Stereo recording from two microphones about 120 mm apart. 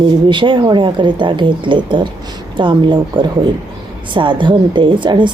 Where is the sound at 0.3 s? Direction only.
40° right (ahead or behind).